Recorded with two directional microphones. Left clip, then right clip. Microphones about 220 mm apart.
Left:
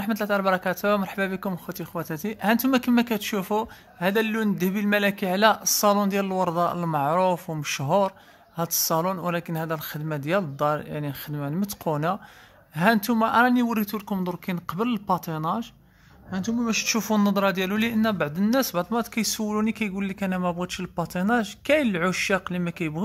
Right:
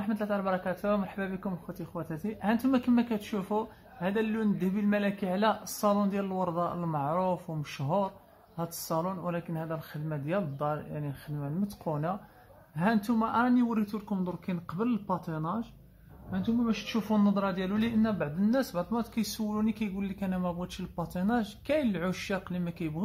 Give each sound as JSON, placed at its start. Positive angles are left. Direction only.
{"t": 0.0, "sound": "a man's voice", "side_deg": 45}